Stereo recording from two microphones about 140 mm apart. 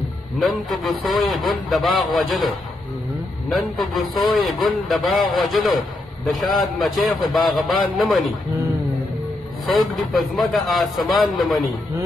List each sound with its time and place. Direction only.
0.4 s a man's voice: centre (ahead or behind)
9.7 s a man's voice: centre (ahead or behind)